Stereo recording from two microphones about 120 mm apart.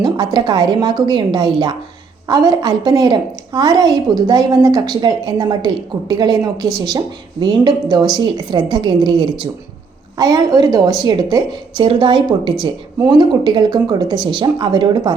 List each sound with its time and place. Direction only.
0.0 s a woman's voice: 35° right (ahead or behind)
11.8 s a woman's voice: 45° right (ahead or behind)